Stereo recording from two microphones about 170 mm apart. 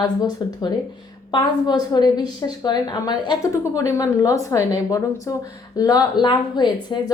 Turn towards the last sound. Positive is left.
turn(degrees=25)  # may be behind; listen again after turning